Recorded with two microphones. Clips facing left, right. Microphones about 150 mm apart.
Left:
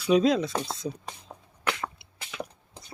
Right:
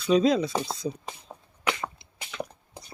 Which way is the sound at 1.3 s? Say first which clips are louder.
Right 1 dB; centre (ahead or behind).